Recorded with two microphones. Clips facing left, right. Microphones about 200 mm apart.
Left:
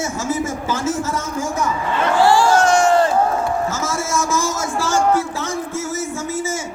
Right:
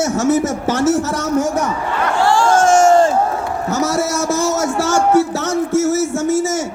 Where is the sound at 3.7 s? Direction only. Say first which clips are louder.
Right 5 dB; 65° right (ahead or behind).